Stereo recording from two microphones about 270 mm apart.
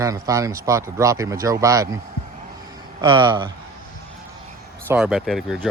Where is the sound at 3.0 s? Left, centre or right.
Centre.